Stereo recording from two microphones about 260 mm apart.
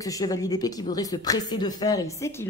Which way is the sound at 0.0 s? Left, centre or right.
Centre.